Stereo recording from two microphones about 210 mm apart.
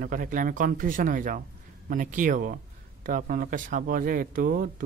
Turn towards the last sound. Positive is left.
turn(degrees=-40)  # may be behind; listen again after turning